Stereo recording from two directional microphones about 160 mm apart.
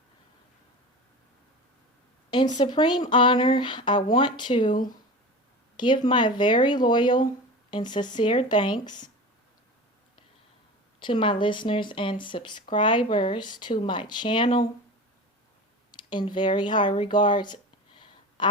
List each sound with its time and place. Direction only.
2.3 s speech: 30° left (ahead or behind)
11.0 s speech: 30° left (ahead or behind)
15.9 s speech: 30° left (ahead or behind)